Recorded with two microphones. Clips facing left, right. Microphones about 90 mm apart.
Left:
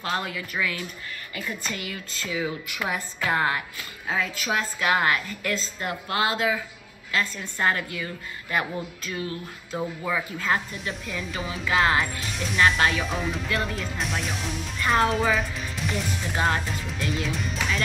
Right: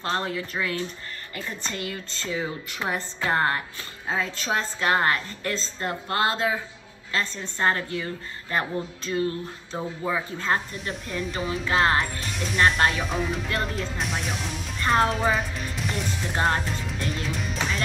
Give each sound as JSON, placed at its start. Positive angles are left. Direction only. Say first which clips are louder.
{"t": 0.0, "sound": "a woman's voice", "louder": "right 2 dB", "side_deg": -35}
{"t": 11.2, "sound": "speech", "louder": "right 5 dB", "side_deg": 0}
{"t": 11.6, "sound": "a woman's voice", "louder": "even", "side_deg": -40}
{"t": 12.0, "sound": "speech", "louder": "even", "side_deg": 0}